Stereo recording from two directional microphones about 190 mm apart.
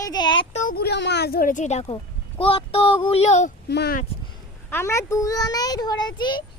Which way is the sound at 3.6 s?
60° left (ahead or behind).